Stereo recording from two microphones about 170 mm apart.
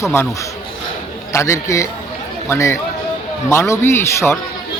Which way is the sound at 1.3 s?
15° left (ahead or behind).